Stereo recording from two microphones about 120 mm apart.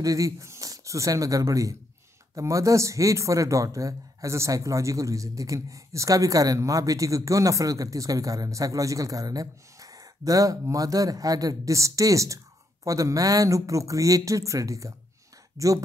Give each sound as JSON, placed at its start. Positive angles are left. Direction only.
{"t": 0.0, "sound": "speech", "side_deg": -30}